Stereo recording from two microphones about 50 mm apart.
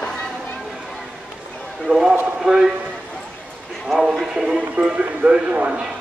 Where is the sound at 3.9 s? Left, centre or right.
Centre.